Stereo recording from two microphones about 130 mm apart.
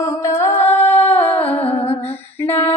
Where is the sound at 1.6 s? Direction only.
50° left (ahead or behind).